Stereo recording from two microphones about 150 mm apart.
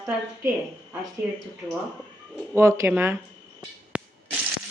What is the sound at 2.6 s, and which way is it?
Speech, 20° right (ahead or behind).